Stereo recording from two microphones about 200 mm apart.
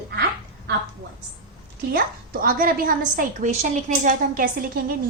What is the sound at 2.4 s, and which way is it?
A woman's voice, 45° right (ahead or behind).